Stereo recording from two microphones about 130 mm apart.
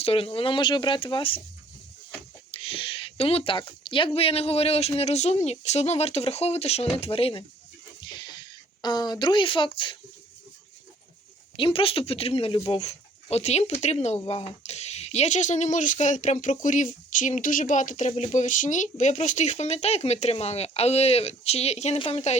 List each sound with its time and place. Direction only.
0.0 s speech: 45° left (ahead or behind)
2.5 s speech: 45° left (ahead or behind)
8.0 s a sound: 35° left (ahead or behind)
11.5 s speech: 45° left (ahead or behind)
21.9 s a woman's voice: 40° left (ahead or behind)